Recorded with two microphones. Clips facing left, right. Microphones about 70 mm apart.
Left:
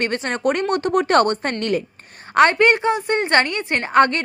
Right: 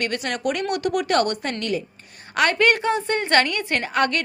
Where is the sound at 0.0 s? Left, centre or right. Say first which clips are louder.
Left 4 dB; left.